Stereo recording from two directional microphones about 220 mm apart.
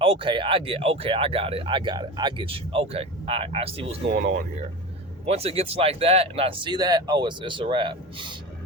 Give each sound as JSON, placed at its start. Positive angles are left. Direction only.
{"t": 0.0, "sound": "speech", "side_deg": -25}
{"t": 5.2, "sound": "speech", "side_deg": -30}